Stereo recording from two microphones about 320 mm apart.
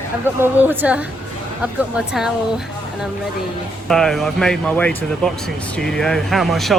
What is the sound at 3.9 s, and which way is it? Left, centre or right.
Speech, centre.